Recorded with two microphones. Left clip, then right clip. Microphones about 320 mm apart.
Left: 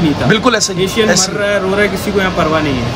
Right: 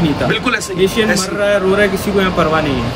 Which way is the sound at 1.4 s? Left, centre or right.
Centre.